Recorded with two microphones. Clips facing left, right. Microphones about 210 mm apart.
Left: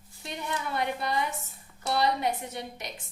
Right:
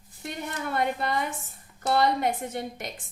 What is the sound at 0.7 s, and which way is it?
A woman's voice, 50° right (ahead or behind).